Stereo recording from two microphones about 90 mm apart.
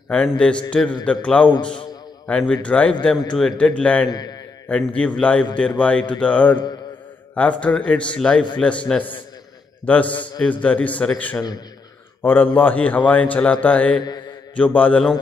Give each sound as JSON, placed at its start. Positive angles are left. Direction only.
{"t": 0.1, "sound": "a man's voice", "side_deg": 10}
{"t": 4.1, "sound": "a man's voice", "side_deg": 45}
{"t": 4.6, "sound": "a man's voice", "side_deg": 15}